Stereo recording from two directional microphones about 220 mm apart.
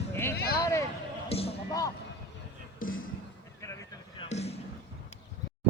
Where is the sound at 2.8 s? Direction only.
40° left (ahead or behind).